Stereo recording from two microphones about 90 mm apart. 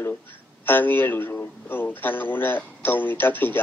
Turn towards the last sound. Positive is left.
turn(degrees=20)  # may be behind; listen again after turning